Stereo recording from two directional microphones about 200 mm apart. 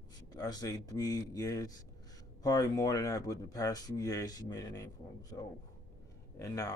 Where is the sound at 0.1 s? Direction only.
20° left (ahead or behind).